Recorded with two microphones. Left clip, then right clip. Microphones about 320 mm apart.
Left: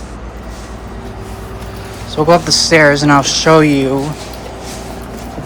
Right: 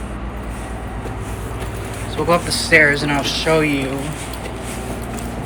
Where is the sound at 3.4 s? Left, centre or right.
Left.